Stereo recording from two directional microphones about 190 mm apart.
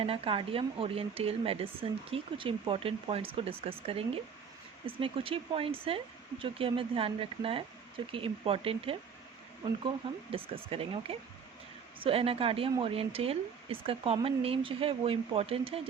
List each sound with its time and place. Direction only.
0.0 s speech: 30° right (ahead or behind)
10.3 s speech: 30° right (ahead or behind)